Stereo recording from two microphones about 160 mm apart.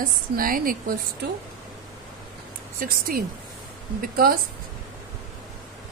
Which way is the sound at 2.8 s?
65° right (ahead or behind).